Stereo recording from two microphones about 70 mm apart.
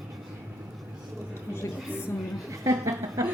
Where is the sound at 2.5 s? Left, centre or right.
Right.